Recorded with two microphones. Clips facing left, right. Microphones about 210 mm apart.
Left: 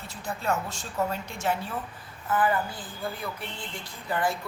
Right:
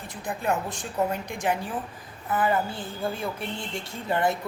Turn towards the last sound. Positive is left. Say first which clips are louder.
# right 3 dB
turn(degrees=-25)  # may be behind; listen again after turning